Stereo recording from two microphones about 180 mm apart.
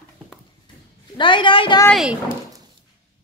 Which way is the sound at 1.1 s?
25° left (ahead or behind).